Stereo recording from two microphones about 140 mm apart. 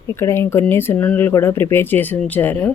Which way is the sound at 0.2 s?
20° left (ahead or behind).